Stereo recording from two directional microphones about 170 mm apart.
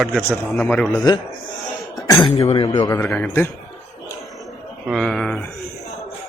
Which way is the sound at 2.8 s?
15° left (ahead or behind).